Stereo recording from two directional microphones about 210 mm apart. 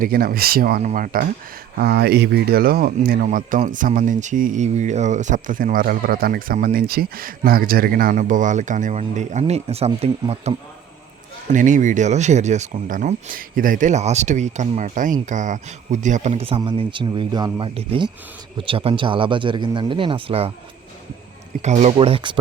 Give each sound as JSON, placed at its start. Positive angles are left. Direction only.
{"t": 0.0, "sound": "speech", "side_deg": -45}
{"t": 11.5, "sound": "speech", "side_deg": -35}
{"t": 21.6, "sound": "speech", "side_deg": -35}